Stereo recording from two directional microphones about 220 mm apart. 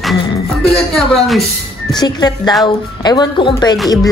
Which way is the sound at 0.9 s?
Centre (ahead or behind).